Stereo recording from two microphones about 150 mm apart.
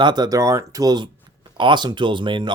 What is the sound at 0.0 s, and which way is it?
Speech, 30° right (ahead or behind).